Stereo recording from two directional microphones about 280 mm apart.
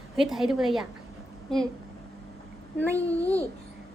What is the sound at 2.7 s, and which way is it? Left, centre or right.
Speech, centre.